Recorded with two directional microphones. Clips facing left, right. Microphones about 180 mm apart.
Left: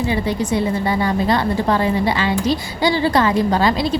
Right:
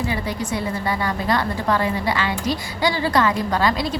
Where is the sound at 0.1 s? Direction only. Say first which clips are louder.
Left 6 dB; 25° left (ahead or behind).